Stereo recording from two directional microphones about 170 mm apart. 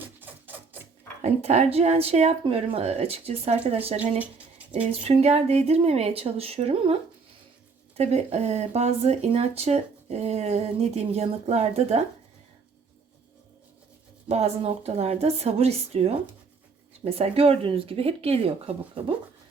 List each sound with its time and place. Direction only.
0.0 s music: 10° right (ahead or behind)
1.2 s speech: 40° right (ahead or behind)
4.2 s a sound: 10° right (ahead or behind)
4.9 s speech: 40° right (ahead or behind)
7.9 s speech: 40° right (ahead or behind)
14.3 s speech: 40° right (ahead or behind)